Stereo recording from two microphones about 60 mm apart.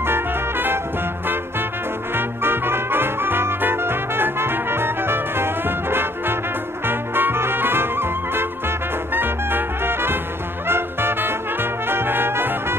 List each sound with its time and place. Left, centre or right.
0.0 s music: right
2.1 s music: right